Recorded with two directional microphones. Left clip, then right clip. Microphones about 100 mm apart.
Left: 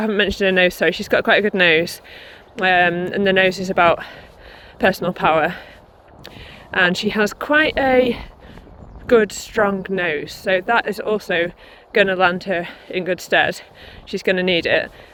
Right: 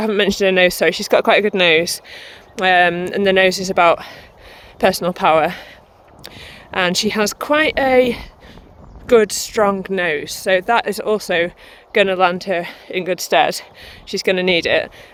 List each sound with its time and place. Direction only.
0.2 s speech: 40° right (ahead or behind)
1.5 s speech: 30° right (ahead or behind)
2.0 s speech: 65° right (ahead or behind); by 9.9 s 45° right (ahead or behind)
9.9 s speech: 60° right (ahead or behind)
11.9 s speech: 40° right (ahead or behind)